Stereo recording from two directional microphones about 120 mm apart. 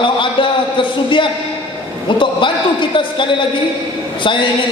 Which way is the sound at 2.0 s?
45° left (ahead or behind).